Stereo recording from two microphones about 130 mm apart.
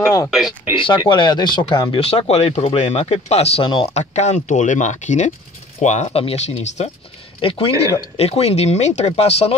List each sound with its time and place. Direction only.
0.0 s a sound: 20° left (ahead or behind)
0.7 s speech: 40° left (ahead or behind)
2.0 s speech: 50° left (ahead or behind)
3.9 s speech: 65° left (ahead or behind)
7.4 s speech: 45° left (ahead or behind)